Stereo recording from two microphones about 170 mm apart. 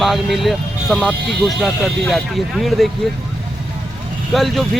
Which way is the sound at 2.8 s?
Centre (ahead or behind).